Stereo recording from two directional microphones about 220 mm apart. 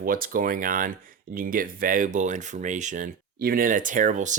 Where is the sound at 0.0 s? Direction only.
40° right (ahead or behind).